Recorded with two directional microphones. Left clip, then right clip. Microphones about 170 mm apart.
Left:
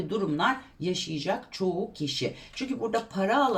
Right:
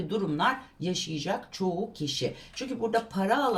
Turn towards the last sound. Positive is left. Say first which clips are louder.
# even
turn(degrees=20)  # may be behind; listen again after turning